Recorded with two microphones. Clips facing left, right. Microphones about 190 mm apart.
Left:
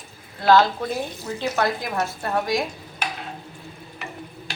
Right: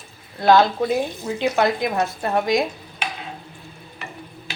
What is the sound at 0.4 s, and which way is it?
Speech, 15° right (ahead or behind).